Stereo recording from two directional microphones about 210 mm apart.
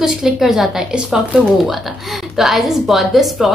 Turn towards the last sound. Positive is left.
turn(degrees=0)  # may be behind; listen again after turning